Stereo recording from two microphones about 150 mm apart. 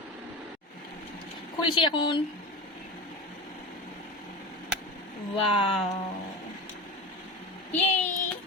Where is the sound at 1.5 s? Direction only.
30° left (ahead or behind).